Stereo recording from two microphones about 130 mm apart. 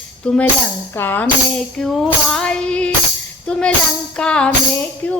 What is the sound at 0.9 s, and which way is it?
Speech, 15° left (ahead or behind).